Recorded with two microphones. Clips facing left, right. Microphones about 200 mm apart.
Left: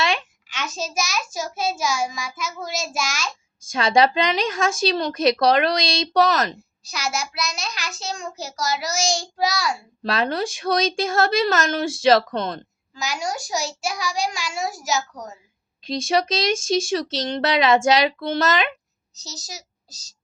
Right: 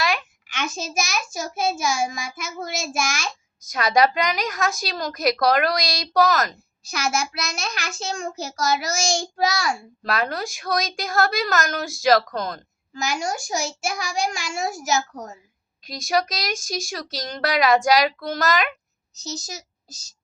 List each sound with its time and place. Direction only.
0.0 s a sound: 25° left (ahead or behind)
0.4 s a child's voice: 55° right (ahead or behind)
3.6 s a woman's voice: 30° left (ahead or behind)
6.9 s a child's voice: 55° right (ahead or behind)
10.0 s a woman's voice: 25° left (ahead or behind)
12.9 s a child's voice: 50° right (ahead or behind)
15.8 s a woman's voice: 25° left (ahead or behind)
19.2 s a woman's voice: 50° right (ahead or behind)